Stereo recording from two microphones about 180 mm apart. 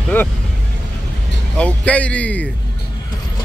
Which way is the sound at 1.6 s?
10° left (ahead or behind).